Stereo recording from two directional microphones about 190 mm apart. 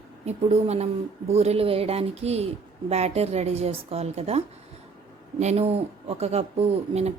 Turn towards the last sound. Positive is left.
turn(degrees=-35)  # may be behind; listen again after turning